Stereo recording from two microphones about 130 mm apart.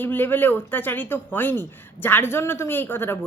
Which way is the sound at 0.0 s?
15° left (ahead or behind).